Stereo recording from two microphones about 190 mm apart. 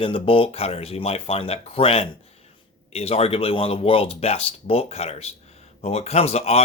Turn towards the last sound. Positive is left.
turn(degrees=35)  # may be behind; listen again after turning